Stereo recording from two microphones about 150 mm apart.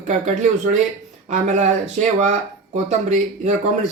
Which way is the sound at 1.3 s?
50° right (ahead or behind).